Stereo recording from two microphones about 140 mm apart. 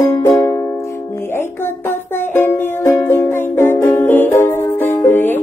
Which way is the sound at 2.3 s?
15° left (ahead or behind).